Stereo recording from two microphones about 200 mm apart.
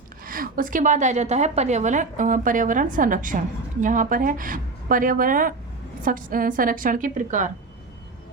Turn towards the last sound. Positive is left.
turn(degrees=-40)  # may be behind; listen again after turning